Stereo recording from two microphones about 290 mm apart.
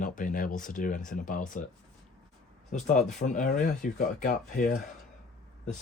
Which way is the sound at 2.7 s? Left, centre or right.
Left.